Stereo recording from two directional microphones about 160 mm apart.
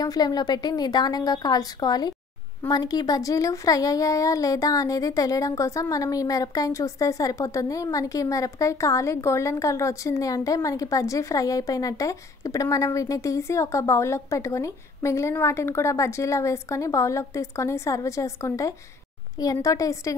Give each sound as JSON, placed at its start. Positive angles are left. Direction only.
{"t": 0.0, "sound": "speech", "side_deg": 25}